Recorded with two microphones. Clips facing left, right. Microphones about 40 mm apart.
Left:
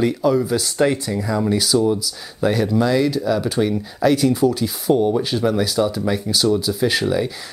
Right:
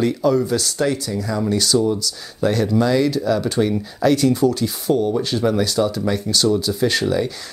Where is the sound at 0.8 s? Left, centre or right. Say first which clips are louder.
Left 2 dB; left.